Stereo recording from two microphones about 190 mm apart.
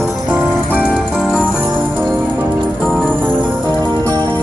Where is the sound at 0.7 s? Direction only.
Centre (ahead or behind).